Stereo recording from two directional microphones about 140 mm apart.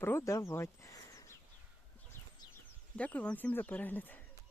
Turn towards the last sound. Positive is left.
turn(degrees=15)  # may be behind; listen again after turning